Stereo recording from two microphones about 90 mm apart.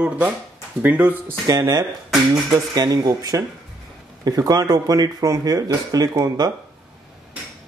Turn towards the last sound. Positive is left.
turn(degrees=-45)  # may be behind; listen again after turning